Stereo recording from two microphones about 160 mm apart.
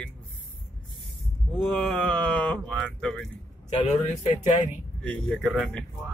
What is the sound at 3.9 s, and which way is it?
Speech, 45° left (ahead or behind).